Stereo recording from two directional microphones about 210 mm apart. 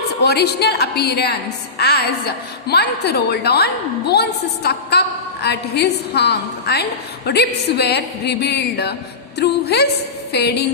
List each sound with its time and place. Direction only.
0.2 s a woman's voice: 50° left (ahead or behind)